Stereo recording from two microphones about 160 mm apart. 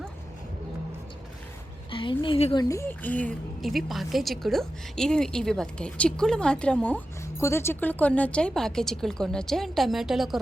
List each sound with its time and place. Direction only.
1.9 s a woman's voice: 30° left (ahead or behind)
2.6 s a woman's voice: 15° left (ahead or behind); by 10.4 s centre (ahead or behind)